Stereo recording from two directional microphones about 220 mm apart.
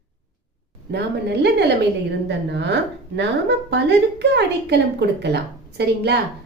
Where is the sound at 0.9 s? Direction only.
50° right (ahead or behind).